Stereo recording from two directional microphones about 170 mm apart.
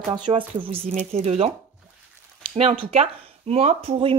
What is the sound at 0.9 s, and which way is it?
Speech, 40° right (ahead or behind).